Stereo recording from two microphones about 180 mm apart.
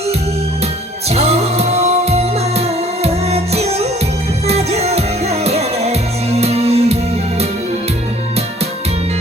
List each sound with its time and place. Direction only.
1.1 s music: 35° right (ahead or behind)